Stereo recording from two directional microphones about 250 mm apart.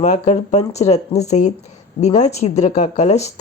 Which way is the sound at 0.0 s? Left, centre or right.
Left.